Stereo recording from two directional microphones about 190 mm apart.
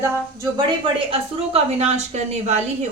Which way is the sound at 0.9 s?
30° right (ahead or behind).